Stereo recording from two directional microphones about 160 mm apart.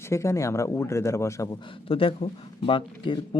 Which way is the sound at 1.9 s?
35° left (ahead or behind).